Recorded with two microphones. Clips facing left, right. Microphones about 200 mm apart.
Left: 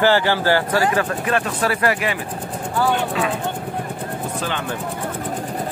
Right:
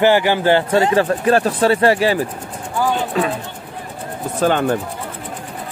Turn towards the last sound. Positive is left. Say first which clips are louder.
# right 9 dB
turn(degrees=-45)  # may be behind; listen again after turning